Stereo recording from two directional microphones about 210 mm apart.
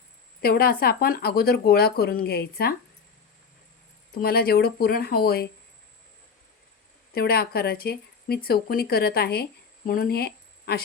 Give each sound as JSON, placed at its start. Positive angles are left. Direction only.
{"t": 0.4, "sound": "speech", "side_deg": 45}
{"t": 4.1, "sound": "speech", "side_deg": 45}
{"t": 7.1, "sound": "speech", "side_deg": 45}